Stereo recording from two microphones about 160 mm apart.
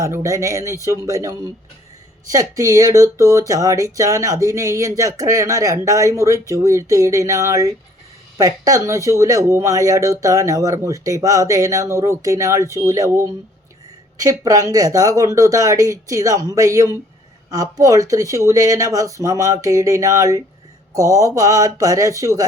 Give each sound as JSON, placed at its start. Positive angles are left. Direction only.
{"t": 0.0, "sound": "speech", "side_deg": -20}